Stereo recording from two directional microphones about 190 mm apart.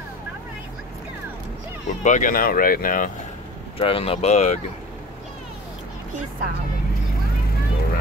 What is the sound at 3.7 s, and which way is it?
Speech, 30° left (ahead or behind).